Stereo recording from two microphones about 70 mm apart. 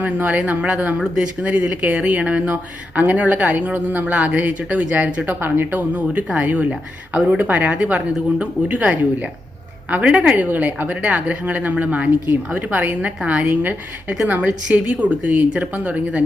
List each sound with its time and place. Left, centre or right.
0.0 s speech: right